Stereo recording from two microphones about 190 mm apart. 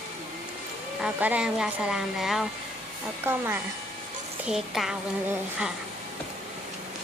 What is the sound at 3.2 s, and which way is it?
A woman's voice, 10° right (ahead or behind).